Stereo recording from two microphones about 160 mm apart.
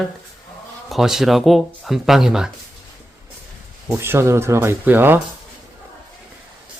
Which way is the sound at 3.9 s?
15° right (ahead or behind).